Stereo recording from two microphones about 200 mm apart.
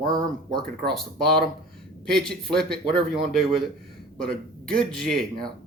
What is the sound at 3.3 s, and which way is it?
Speech, centre (ahead or behind).